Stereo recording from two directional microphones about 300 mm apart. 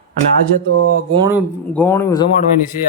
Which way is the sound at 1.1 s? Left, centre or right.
Centre.